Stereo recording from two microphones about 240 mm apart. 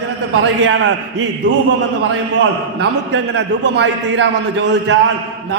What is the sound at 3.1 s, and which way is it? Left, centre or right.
A man's voice, right.